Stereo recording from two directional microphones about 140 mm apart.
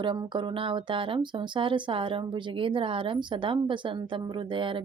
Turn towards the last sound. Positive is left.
turn(degrees=-35)  # may be behind; listen again after turning